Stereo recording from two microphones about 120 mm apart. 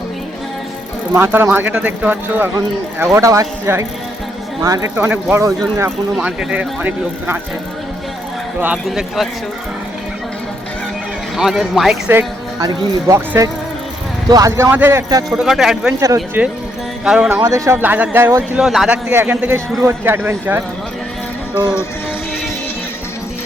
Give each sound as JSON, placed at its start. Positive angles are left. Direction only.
{"t": 1.1, "sound": "speech", "side_deg": -20}
{"t": 4.9, "sound": "speech", "side_deg": -15}
{"t": 6.1, "sound": "speech", "side_deg": -10}
{"t": 8.6, "sound": "speech", "side_deg": -5}
{"t": 11.3, "sound": "speech", "side_deg": -5}
{"t": 12.5, "sound": "speech", "side_deg": -25}
{"t": 14.5, "sound": "speech", "side_deg": -20}
{"t": 15.4, "sound": "speech", "side_deg": -5}
{"t": 16.0, "sound": "speech", "side_deg": -30}
{"t": 17.0, "sound": "music", "side_deg": -5}
{"t": 17.4, "sound": "speech", "side_deg": -30}
{"t": 17.7, "sound": "speech", "side_deg": -15}
{"t": 18.5, "sound": "speech", "side_deg": 0}